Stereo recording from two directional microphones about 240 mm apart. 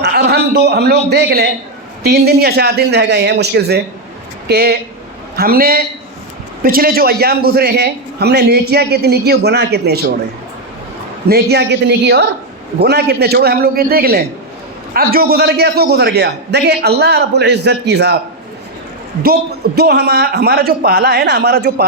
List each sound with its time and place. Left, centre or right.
0.0 s a man's voice: right
11.3 s a man's voice: right
19.2 s a man's voice: right